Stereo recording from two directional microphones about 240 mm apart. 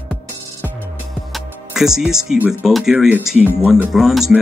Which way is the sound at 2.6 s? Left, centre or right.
Centre.